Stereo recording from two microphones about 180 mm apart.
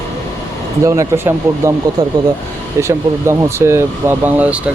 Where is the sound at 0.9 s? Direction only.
15° right (ahead or behind).